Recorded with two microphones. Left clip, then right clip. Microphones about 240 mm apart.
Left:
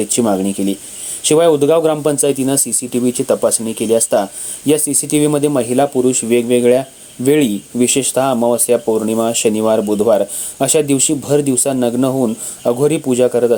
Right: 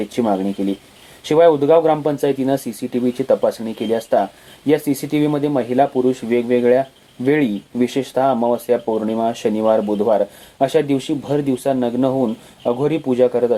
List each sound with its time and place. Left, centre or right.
0.1 s speech: left